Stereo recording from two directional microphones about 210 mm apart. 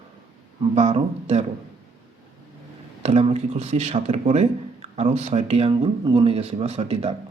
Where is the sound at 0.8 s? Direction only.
30° right (ahead or behind).